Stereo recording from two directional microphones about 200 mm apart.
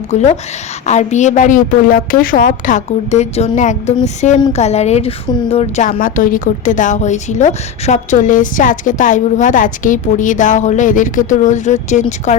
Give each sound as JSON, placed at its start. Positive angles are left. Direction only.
{"t": 0.1, "sound": "a woman's voice", "side_deg": 35}